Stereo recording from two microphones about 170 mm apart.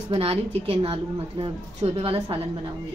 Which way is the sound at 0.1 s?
35° right (ahead or behind).